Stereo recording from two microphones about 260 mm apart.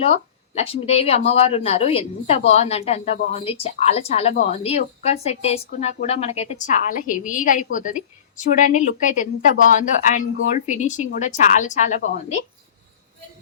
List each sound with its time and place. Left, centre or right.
0.0 s a woman's voice: left